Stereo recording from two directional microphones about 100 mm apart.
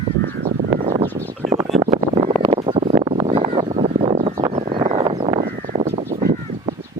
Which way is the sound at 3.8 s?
80° right.